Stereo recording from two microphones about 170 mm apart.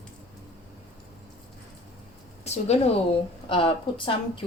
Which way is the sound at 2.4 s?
40° left (ahead or behind).